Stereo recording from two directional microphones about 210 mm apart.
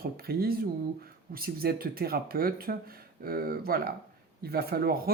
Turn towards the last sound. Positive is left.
turn(degrees=-45)  # may be behind; listen again after turning